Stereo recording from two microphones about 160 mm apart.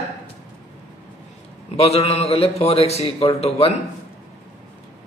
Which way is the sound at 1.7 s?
40° left (ahead or behind).